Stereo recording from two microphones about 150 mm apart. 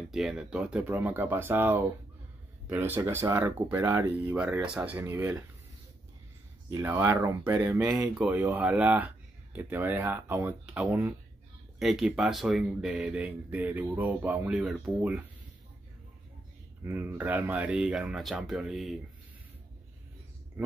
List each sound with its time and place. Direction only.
0.1 s speech: centre (ahead or behind)
6.7 s speech: 15° right (ahead or behind)
8.1 s speech: 5° right (ahead or behind)
16.8 s speech: 15° right (ahead or behind)